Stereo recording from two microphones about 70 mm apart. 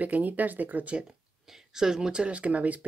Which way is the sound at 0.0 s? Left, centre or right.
Right.